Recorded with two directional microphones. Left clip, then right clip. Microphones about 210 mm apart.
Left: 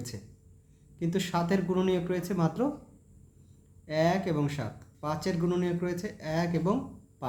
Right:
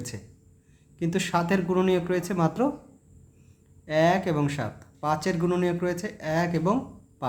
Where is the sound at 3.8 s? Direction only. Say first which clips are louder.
Right 5 dB; 15° right (ahead or behind).